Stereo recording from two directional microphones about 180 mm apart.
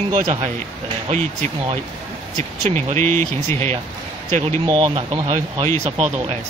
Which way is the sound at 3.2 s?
15° left (ahead or behind).